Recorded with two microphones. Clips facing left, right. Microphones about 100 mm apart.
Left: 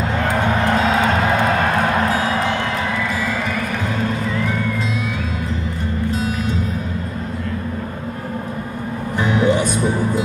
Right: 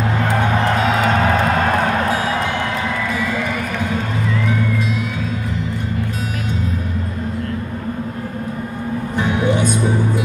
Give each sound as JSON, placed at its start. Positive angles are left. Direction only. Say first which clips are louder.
{"t": 9.2, "sound": "music", "louder": "left 2 dB", "side_deg": -20}